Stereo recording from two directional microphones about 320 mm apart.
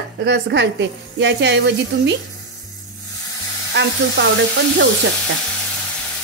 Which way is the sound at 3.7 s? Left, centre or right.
Right.